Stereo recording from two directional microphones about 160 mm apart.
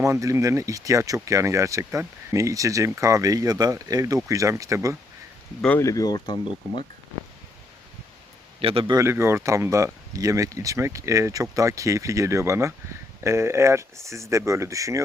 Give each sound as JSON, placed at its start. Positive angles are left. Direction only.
{"t": 0.0, "sound": "speech", "side_deg": -20}
{"t": 5.6, "sound": "speech", "side_deg": 10}
{"t": 5.9, "sound": "speech", "side_deg": 25}
{"t": 8.6, "sound": "a man's voice", "side_deg": -35}
{"t": 9.0, "sound": "speech", "side_deg": -15}